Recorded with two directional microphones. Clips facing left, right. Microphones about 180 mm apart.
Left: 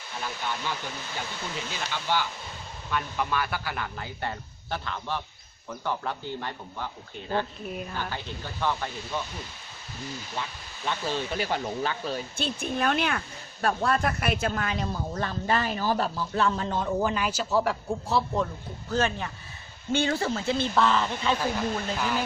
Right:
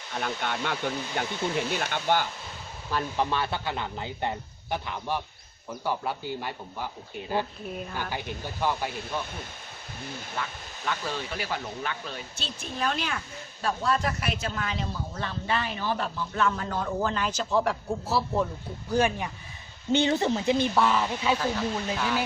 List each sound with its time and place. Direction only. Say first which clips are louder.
0.2 s speech: right 3 dB; 65° right (ahead or behind)
2.9 s speech: right 2 dB; 30° right (ahead or behind); by 9.2 s 10° right (ahead or behind)
10.9 s speech: left 2 dB; 25° left (ahead or behind)
12.4 s speech: left 3 dB; 55° left (ahead or behind); by 16.9 s 25° left (ahead or behind)
17.0 s a man's voice: left 1 dB; 10° left (ahead or behind); by 22.2 s 10° right (ahead or behind)